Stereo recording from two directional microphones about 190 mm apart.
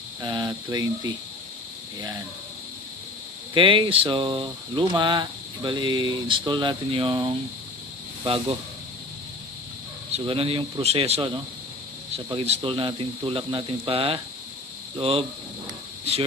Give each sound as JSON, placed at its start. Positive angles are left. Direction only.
{"t": 0.2, "sound": "speech", "side_deg": -25}
{"t": 3.5, "sound": "speech", "side_deg": -25}
{"t": 10.1, "sound": "speech", "side_deg": -30}
{"t": 15.0, "sound": "hum", "side_deg": -30}